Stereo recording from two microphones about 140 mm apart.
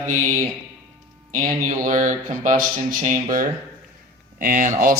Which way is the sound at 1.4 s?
70° right (ahead or behind).